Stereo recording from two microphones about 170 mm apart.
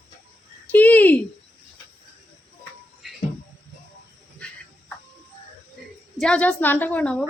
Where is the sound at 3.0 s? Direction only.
Centre (ahead or behind).